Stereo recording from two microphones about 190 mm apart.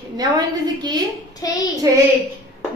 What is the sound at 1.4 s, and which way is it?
Speech, 20° left (ahead or behind).